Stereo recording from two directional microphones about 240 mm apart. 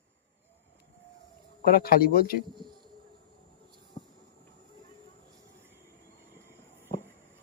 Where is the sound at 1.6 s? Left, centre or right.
Left.